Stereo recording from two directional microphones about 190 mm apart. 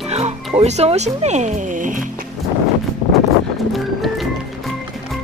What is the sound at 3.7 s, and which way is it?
Music, centre (ahead or behind).